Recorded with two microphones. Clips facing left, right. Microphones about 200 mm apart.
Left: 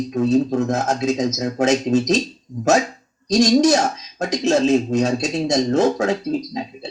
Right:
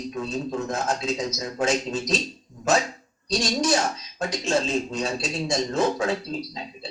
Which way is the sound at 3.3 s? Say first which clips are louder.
Left 9 dB; 45° left (ahead or behind).